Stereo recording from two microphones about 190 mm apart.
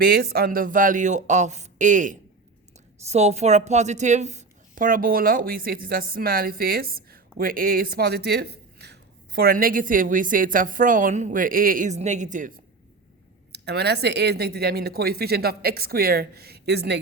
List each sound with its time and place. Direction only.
0.0 s a woman's voice: 55° right (ahead or behind)
13.5 s speech: 60° right (ahead or behind)